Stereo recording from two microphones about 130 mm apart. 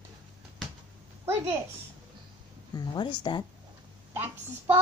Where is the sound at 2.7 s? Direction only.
35° left (ahead or behind).